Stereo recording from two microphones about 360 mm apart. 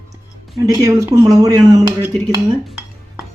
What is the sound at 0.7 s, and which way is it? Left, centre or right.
Speech, centre.